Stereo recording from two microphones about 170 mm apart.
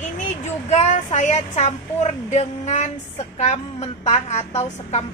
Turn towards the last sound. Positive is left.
turn(degrees=40)  # may be behind; listen again after turning